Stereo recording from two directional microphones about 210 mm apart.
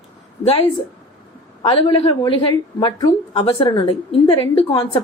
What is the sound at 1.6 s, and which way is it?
A woman's voice, 25° left (ahead or behind).